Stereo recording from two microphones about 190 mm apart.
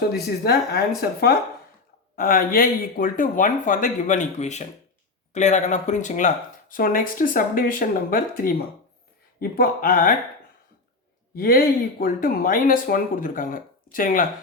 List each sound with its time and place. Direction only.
0.1 s speech: 60° left (ahead or behind)
2.1 s speech: 50° left (ahead or behind)
11.3 s speech: 50° left (ahead or behind)